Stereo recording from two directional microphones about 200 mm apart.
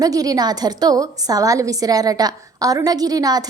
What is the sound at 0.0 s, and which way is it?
A woman's voice, 20° right (ahead or behind).